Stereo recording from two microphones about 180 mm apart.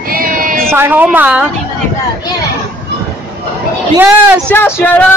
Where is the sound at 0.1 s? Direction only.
50° right (ahead or behind).